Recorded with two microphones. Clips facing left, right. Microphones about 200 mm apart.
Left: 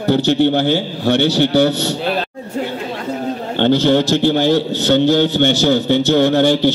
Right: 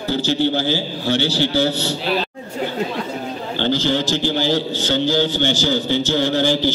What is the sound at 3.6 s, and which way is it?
A man's voice, 60° left (ahead or behind).